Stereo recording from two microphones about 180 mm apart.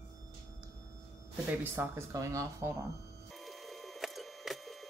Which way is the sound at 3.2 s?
Centre (ahead or behind).